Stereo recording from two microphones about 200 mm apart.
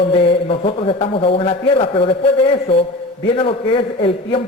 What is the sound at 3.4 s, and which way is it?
A man's voice, 25° left (ahead or behind).